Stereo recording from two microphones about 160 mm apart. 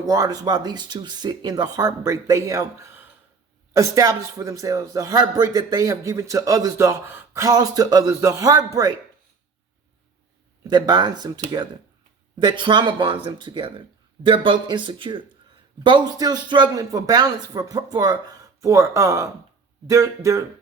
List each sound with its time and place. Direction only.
0.0 s speech: 20° right (ahead or behind)
10.6 s speech: 25° right (ahead or behind)